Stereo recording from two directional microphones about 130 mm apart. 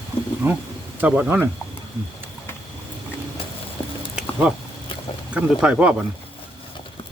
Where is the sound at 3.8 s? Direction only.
40° left (ahead or behind).